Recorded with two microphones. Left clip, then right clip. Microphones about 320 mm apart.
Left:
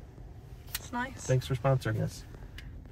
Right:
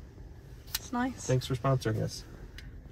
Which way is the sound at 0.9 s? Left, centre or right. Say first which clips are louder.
Right 1 dB; right.